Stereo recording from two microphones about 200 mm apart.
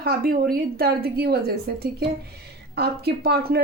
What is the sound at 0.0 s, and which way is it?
Speech, 50° right (ahead or behind).